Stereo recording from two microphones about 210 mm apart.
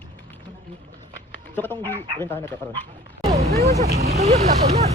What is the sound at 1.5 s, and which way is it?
Speech, 10° left (ahead or behind).